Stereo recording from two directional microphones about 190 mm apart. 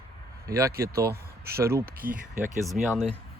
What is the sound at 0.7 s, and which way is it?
Speech, 55° right (ahead or behind).